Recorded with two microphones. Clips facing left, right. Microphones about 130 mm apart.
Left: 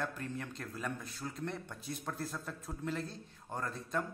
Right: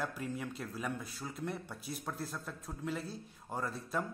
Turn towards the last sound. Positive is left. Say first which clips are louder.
# even
turn(degrees=-5)  # may be behind; listen again after turning